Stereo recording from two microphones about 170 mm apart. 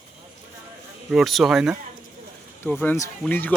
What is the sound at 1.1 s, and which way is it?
Speech, centre (ahead or behind).